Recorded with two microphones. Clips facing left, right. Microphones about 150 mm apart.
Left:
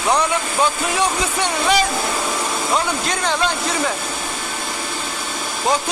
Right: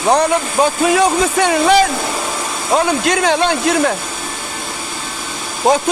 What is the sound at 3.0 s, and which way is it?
Speech, 70° right (ahead or behind).